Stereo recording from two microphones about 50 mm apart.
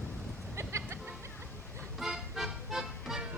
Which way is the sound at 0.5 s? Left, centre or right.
Right.